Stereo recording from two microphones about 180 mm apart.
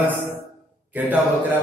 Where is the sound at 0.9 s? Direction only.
10° right (ahead or behind).